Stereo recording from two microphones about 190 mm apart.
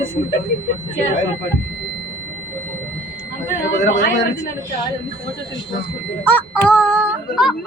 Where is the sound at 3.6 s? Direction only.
75° left (ahead or behind).